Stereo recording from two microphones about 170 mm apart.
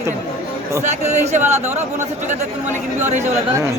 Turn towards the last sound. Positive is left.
turn(degrees=-45)  # may be behind; listen again after turning